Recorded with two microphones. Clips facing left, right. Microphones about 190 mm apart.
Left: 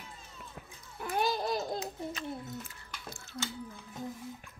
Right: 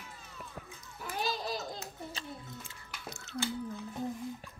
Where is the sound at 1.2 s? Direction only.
55° left (ahead or behind).